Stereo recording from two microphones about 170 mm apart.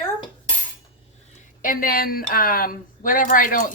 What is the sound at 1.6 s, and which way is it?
A woman's voice, 55° left (ahead or behind).